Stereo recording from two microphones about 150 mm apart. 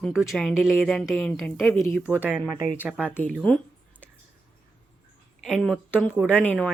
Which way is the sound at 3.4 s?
10° left (ahead or behind).